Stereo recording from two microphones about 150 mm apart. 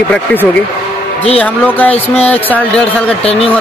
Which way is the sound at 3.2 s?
40° left (ahead or behind).